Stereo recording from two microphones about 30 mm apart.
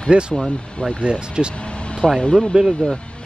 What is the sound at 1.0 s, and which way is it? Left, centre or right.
Speech, right.